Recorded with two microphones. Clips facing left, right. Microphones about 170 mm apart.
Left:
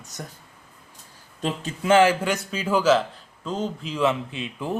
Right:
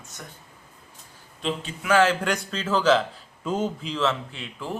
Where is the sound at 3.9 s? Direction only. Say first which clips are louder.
Left 3 dB; 15° left (ahead or behind).